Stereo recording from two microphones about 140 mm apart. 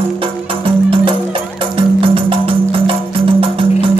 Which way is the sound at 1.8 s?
40° right (ahead or behind).